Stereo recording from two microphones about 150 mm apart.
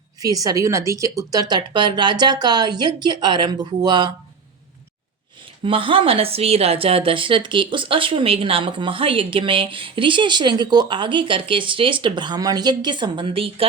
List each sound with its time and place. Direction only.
0.2 s speech: 25° right (ahead or behind)
5.6 s speech: 35° right (ahead or behind)